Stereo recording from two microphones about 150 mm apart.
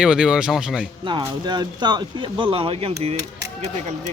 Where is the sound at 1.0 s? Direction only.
30° right (ahead or behind).